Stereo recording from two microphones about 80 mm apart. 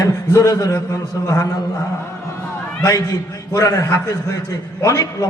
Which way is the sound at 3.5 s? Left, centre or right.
Left.